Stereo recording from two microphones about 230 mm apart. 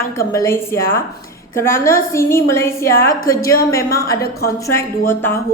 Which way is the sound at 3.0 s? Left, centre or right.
Left.